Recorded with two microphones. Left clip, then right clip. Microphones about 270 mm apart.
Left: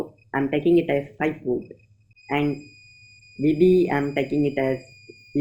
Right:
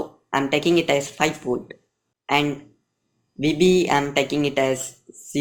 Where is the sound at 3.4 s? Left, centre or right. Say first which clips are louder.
Even; centre.